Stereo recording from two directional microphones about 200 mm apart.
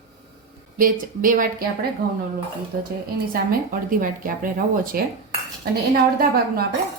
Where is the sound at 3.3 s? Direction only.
45° right (ahead or behind).